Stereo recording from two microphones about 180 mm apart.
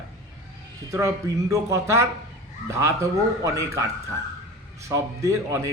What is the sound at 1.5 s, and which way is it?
A man's voice, 15° right (ahead or behind).